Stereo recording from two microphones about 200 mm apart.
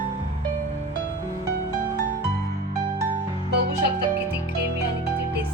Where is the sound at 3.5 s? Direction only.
55° right (ahead or behind).